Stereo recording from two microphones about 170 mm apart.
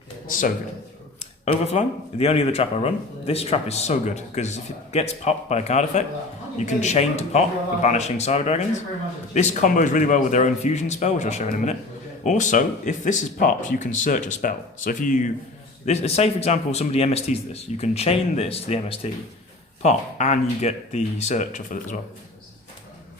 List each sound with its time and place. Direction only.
0.3 s speech: 50° left (ahead or behind)
1.2 s speech: 40° left (ahead or behind)